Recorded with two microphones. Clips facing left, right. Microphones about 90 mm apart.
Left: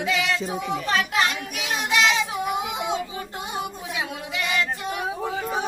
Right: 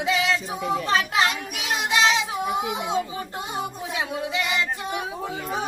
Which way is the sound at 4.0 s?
20° right (ahead or behind).